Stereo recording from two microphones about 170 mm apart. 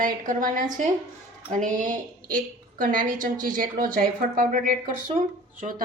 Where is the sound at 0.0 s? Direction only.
55° right (ahead or behind).